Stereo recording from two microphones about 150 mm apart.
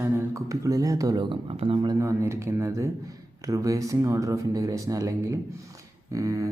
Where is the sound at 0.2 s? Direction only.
20° right (ahead or behind).